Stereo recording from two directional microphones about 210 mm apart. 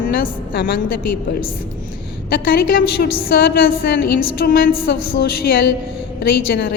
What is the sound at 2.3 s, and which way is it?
A woman's voice, 45° left (ahead or behind).